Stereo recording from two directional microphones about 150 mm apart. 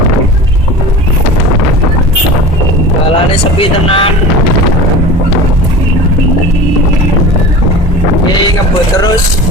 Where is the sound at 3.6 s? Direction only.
40° left (ahead or behind).